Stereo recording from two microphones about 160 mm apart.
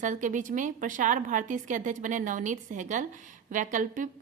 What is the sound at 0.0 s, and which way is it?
A woman's voice, 50° right (ahead or behind).